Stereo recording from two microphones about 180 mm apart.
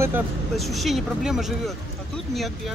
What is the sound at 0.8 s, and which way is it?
Speech, centre (ahead or behind).